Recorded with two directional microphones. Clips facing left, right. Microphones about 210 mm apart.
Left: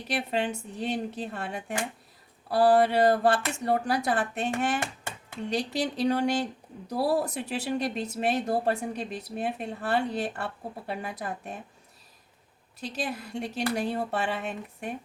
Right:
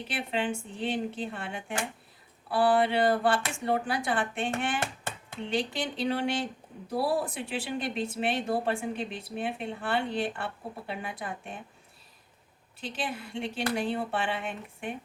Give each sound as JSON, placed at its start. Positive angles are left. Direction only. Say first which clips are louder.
{"t": 0.1, "sound": "speech", "louder": "left 3 dB", "side_deg": 40}
{"t": 12.8, "sound": "speech", "louder": "left 2 dB", "side_deg": 40}